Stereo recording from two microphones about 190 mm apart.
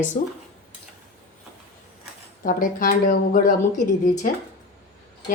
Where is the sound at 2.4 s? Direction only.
45° left (ahead or behind).